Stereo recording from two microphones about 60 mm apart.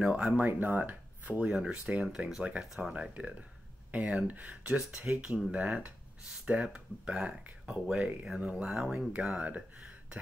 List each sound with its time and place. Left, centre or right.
0.0 s speech: centre
1.5 s speech: centre
2.9 s speech: centre
9.2 s speech: right